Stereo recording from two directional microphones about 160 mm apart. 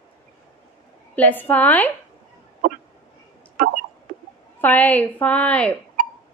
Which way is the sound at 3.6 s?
60° right (ahead or behind).